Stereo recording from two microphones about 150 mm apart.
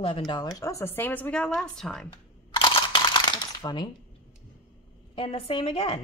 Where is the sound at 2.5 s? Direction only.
30° left (ahead or behind).